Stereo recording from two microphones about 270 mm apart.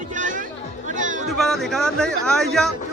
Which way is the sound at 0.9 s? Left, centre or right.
Right.